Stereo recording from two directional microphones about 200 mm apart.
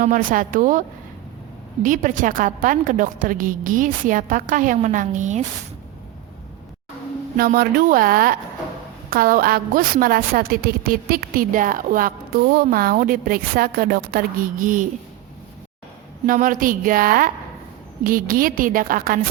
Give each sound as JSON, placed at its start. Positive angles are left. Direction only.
{"t": 0.0, "sound": "a woman's voice", "side_deg": -40}
{"t": 7.3, "sound": "a woman's voice", "side_deg": -45}
{"t": 16.2, "sound": "a woman's voice", "side_deg": -45}